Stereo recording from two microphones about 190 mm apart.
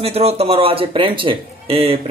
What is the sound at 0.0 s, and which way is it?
A man's voice, 30° right (ahead or behind).